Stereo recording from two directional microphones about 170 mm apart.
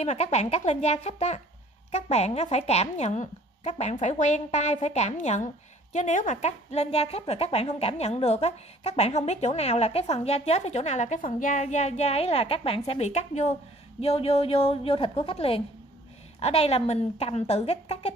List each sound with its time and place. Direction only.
0.0 s a woman's voice: 40° left (ahead or behind)